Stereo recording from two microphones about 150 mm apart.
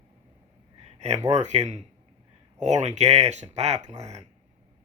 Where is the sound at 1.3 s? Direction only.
50° right (ahead or behind).